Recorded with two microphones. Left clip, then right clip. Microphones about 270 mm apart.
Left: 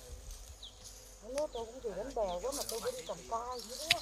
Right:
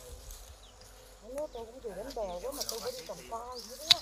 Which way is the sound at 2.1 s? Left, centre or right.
Centre.